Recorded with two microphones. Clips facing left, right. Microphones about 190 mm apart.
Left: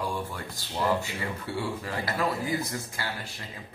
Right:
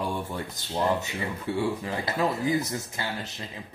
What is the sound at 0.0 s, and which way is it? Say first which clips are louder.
Speech: right 2 dB; 20° right (ahead or behind).